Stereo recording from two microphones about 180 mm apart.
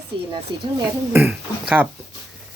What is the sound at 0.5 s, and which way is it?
Speech, 25° right (ahead or behind).